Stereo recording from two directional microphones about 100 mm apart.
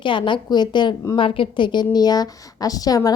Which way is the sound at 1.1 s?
60° left (ahead or behind).